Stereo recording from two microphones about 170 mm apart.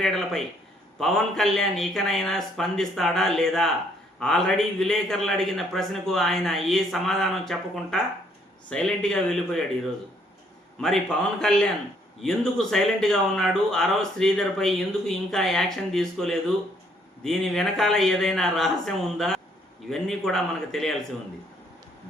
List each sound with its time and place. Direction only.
0.0 s speech: centre (ahead or behind)
10.8 s speech: centre (ahead or behind)